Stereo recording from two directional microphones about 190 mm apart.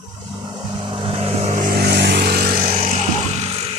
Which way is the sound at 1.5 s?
50° right (ahead or behind).